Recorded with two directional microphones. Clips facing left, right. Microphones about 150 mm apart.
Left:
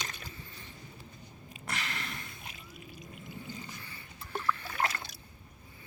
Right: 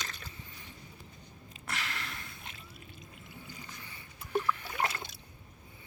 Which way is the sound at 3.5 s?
15° right (ahead or behind).